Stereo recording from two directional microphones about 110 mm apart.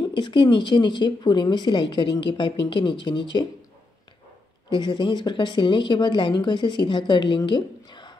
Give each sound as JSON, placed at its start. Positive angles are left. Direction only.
{"t": 0.1, "sound": "a woman's voice", "side_deg": 45}
{"t": 4.7, "sound": "a woman's voice", "side_deg": 45}